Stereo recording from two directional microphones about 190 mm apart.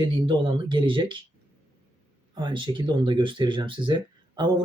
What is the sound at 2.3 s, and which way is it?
Speech, 25° right (ahead or behind).